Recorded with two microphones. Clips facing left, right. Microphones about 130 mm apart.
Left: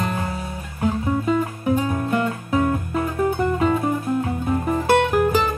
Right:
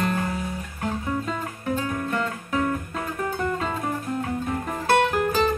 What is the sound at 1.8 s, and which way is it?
Music, 20° left (ahead or behind).